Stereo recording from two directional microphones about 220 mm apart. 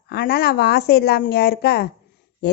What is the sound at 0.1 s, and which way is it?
A woman's voice, 45° left (ahead or behind).